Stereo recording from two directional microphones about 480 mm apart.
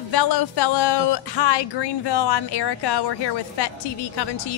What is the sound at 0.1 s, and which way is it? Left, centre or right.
Speech, left.